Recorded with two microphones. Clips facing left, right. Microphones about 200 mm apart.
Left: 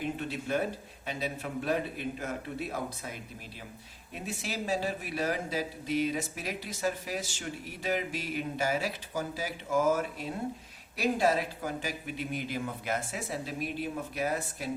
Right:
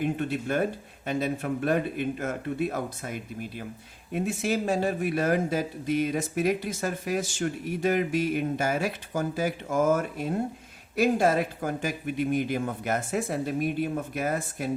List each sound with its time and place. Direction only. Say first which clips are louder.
0.0 s a man's voice: right 6 dB; 50° right (ahead or behind)